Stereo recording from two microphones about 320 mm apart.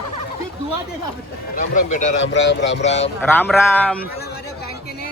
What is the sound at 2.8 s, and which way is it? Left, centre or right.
Speech, left.